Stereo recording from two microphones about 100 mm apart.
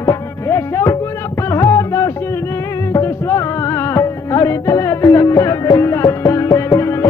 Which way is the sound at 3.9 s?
30° left (ahead or behind).